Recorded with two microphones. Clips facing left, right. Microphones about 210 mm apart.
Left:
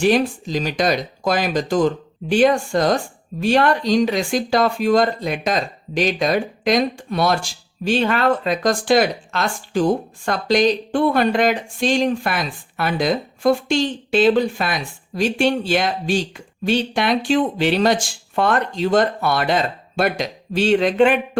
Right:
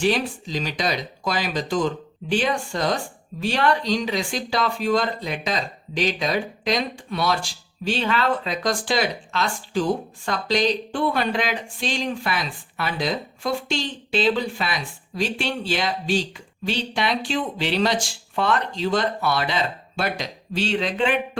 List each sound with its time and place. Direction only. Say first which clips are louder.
0.0 s speech: left 5 dB; 50° left (ahead or behind)